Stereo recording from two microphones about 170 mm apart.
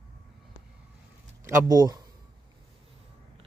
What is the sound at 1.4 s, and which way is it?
Speech, 20° right (ahead or behind).